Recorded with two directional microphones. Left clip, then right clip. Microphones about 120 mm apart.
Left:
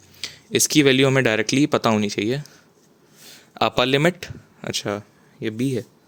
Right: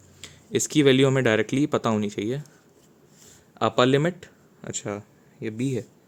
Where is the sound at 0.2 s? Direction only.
15° left (ahead or behind).